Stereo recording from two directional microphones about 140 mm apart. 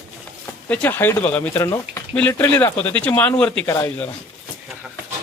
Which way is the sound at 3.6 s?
20° left (ahead or behind).